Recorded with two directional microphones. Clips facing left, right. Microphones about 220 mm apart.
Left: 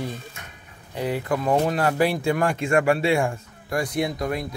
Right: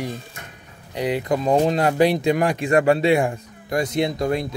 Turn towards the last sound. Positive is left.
turn(degrees=-25)  # may be behind; listen again after turning